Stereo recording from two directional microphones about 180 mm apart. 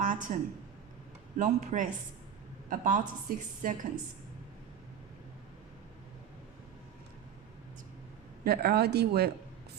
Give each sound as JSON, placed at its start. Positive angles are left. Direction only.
{"t": 0.0, "sound": "a sound", "side_deg": -45}
{"t": 1.4, "sound": "a woman's voice", "side_deg": -45}
{"t": 8.4, "sound": "speech", "side_deg": -65}